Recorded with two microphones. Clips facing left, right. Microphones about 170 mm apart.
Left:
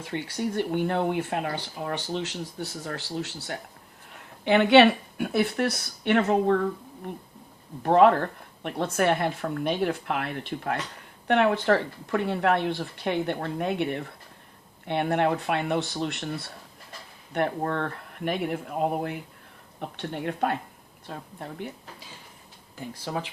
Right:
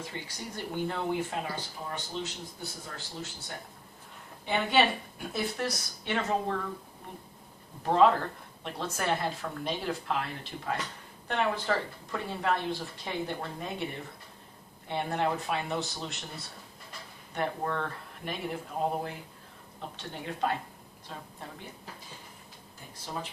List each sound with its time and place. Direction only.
0.0 s speech: 65° left (ahead or behind)
7.8 s speech: 60° left (ahead or behind)
17.3 s speech: 60° left (ahead or behind)